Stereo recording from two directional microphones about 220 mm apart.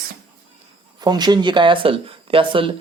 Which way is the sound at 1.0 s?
20° right (ahead or behind).